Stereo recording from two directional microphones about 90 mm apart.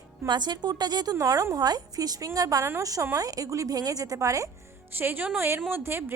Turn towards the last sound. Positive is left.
turn(degrees=-25)  # may be behind; listen again after turning